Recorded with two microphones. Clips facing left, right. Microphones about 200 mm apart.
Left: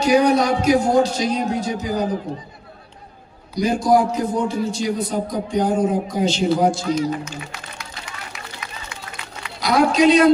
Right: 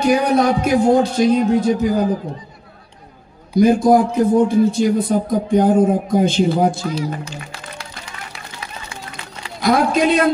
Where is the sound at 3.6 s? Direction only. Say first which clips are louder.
Right 5 dB; 55° right (ahead or behind).